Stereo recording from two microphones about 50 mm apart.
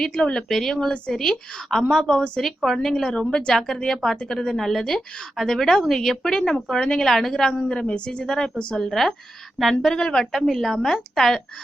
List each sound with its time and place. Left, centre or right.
0.0 s a woman's voice: centre